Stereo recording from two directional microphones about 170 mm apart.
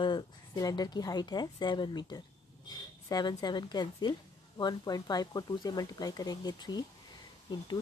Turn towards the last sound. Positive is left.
turn(degrees=25)  # may be behind; listen again after turning